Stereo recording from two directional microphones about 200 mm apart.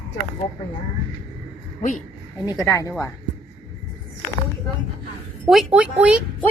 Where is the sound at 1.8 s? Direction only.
40° left (ahead or behind).